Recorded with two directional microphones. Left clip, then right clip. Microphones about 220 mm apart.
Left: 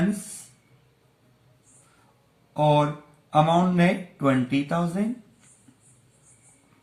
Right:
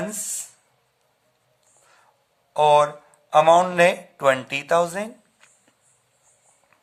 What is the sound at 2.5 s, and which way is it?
Speech, 45° right (ahead or behind).